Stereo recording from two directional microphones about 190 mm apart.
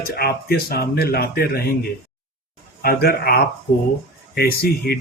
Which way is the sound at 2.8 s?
55° left (ahead or behind).